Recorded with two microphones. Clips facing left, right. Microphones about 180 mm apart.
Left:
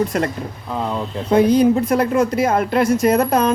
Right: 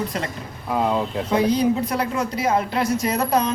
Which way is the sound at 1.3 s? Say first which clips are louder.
Left 6 dB; 50° left (ahead or behind).